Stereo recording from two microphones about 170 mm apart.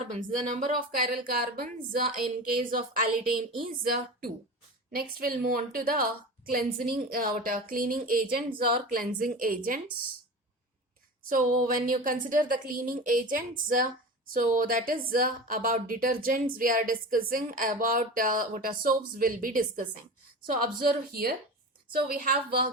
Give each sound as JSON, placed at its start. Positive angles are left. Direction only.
{"t": 0.0, "sound": "a woman's voice", "side_deg": -45}
{"t": 4.9, "sound": "a woman's voice", "side_deg": -60}
{"t": 11.3, "sound": "a woman's voice", "side_deg": -55}